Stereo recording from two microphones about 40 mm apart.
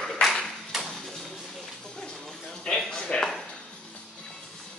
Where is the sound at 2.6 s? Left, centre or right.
Centre.